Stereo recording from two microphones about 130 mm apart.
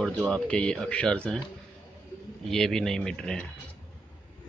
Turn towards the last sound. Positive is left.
turn(degrees=5)  # may be behind; listen again after turning